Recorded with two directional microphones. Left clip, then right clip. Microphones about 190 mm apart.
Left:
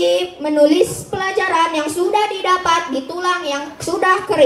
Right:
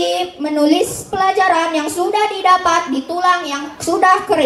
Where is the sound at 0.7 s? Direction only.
35° right (ahead or behind).